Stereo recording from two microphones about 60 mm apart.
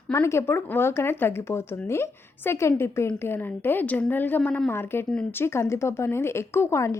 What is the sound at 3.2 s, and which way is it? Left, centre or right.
A woman's voice, left.